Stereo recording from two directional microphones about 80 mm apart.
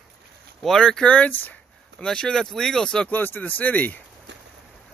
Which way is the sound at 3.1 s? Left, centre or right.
Left.